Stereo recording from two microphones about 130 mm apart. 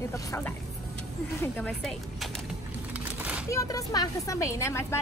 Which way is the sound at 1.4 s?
10° left (ahead or behind).